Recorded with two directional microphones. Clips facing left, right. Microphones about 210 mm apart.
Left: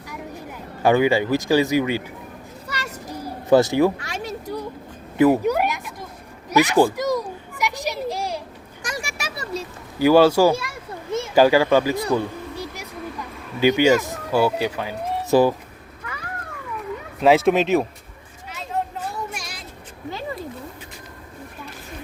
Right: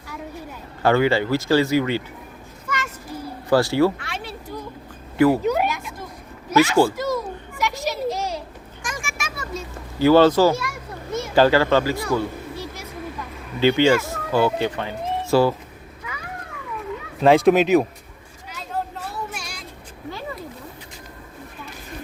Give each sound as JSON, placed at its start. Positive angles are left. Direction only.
{"t": 0.8, "sound": "speech", "side_deg": 15}
{"t": 2.6, "sound": "children playing", "side_deg": 40}
{"t": 3.5, "sound": "speech", "side_deg": 20}
{"t": 4.0, "sound": "a sound", "side_deg": 45}
{"t": 5.1, "sound": "a sound", "side_deg": 15}
{"t": 8.8, "sound": "a sound", "side_deg": 40}
{"t": 10.0, "sound": "speech", "side_deg": 10}
{"t": 10.5, "sound": "children playing", "side_deg": 30}
{"t": 11.3, "sound": "speech", "side_deg": 15}
{"t": 12.1, "sound": "a sound", "side_deg": 15}
{"t": 13.6, "sound": "speech", "side_deg": 15}
{"t": 17.2, "sound": "speech", "side_deg": 0}